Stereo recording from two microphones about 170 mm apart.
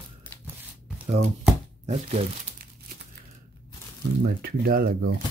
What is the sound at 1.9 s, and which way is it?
Speech, 45° right (ahead or behind).